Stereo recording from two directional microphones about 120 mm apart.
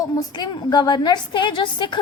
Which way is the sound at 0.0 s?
35° left (ahead or behind).